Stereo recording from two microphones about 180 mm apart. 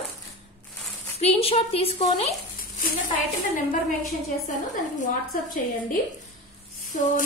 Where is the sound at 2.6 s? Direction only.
50° left (ahead or behind).